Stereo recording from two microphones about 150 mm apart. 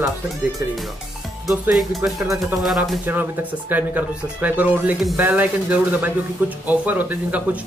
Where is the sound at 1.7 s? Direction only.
Centre (ahead or behind).